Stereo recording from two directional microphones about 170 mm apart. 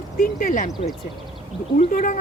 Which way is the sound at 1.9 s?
50° left (ahead or behind).